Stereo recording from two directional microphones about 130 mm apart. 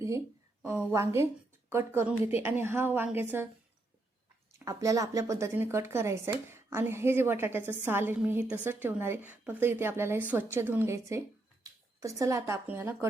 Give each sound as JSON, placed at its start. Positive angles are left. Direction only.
{"t": 0.9, "sound": "a woman's voice", "side_deg": -20}
{"t": 4.6, "sound": "a woman's voice", "side_deg": -25}
{"t": 11.6, "sound": "a sound", "side_deg": -25}
{"t": 12.6, "sound": "speech", "side_deg": -15}